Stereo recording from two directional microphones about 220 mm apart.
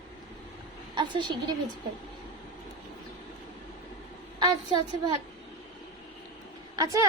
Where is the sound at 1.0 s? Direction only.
20° right (ahead or behind).